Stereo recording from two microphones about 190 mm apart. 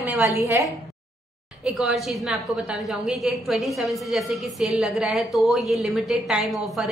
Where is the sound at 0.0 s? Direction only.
10° right (ahead or behind).